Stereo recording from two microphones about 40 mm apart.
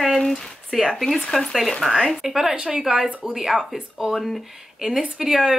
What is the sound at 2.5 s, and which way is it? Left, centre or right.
Speech, right.